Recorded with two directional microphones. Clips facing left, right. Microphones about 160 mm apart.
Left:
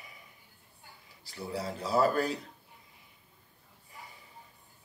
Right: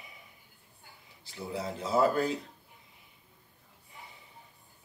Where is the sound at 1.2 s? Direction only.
20° right (ahead or behind).